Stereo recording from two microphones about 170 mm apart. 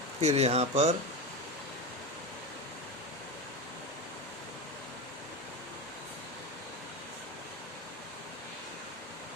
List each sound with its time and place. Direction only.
0.2 s speech: 40° right (ahead or behind)